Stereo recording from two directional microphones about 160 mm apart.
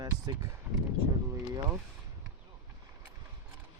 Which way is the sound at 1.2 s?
20° right (ahead or behind).